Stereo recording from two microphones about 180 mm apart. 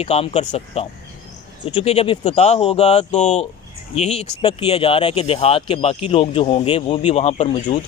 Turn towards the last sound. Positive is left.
turn(degrees=35)  # may be behind; listen again after turning